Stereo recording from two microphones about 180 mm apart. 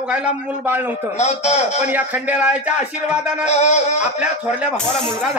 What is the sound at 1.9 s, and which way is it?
Speech, 10° right (ahead or behind).